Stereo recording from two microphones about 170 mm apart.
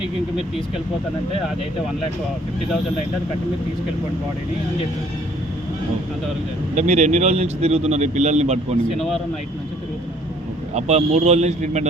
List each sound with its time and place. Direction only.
6.7 s a man's voice: 45° right (ahead or behind)
10.8 s a man's voice: 40° right (ahead or behind)